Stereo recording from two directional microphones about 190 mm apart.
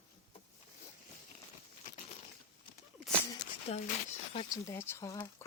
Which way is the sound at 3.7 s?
35° left (ahead or behind).